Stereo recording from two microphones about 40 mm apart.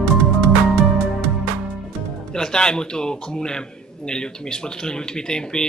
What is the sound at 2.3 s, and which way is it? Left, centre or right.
Speech, centre.